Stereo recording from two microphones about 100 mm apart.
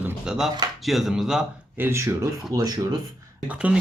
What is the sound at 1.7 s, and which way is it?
Speech, 25° right (ahead or behind).